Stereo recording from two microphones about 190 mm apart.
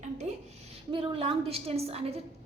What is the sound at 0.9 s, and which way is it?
A woman's voice, 30° right (ahead or behind).